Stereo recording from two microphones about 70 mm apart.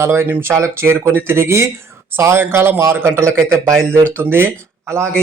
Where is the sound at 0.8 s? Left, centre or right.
Right.